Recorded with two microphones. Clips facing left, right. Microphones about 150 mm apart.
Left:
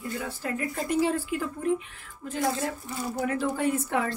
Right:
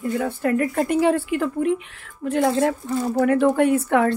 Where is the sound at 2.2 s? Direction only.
60° right (ahead or behind).